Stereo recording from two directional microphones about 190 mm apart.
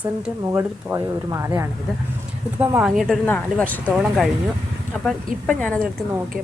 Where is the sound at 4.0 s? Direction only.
Centre (ahead or behind).